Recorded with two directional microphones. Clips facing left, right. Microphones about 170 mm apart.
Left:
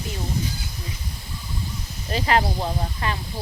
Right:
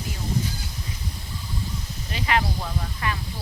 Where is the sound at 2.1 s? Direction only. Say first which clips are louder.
Left 4 dB; 35° left (ahead or behind).